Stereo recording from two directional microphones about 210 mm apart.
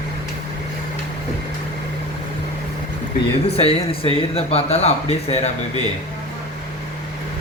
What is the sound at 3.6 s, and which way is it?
Speech, 30° left (ahead or behind).